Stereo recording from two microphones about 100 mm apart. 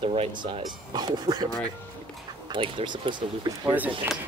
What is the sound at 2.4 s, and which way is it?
Speech, 55° right (ahead or behind).